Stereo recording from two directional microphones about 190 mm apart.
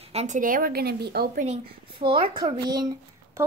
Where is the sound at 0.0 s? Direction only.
35° right (ahead or behind); by 1.5 s 50° right (ahead or behind).